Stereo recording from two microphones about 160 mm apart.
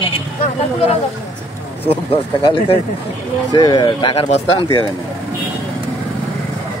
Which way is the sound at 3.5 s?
25° left (ahead or behind).